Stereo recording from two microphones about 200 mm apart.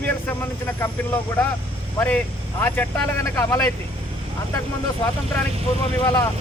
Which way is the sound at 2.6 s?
10° left (ahead or behind).